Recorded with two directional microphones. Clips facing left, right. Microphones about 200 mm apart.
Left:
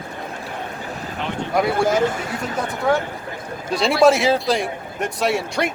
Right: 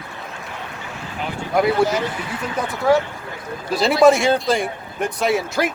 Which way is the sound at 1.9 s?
50° left (ahead or behind).